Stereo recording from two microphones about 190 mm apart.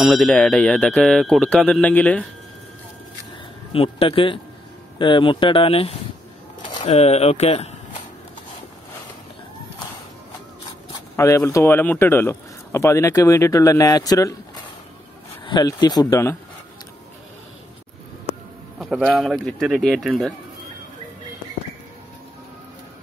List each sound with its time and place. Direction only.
0.0 s speech: centre (ahead or behind)
3.7 s speech: 30° left (ahead or behind)
11.1 s speech: 15° left (ahead or behind)
15.4 s speech: 20° left (ahead or behind)
18.8 s speech: centre (ahead or behind)